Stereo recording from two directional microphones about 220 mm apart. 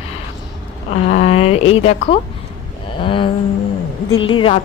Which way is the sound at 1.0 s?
30° left (ahead or behind).